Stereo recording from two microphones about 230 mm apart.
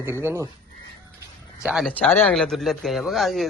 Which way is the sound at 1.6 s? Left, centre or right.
Centre.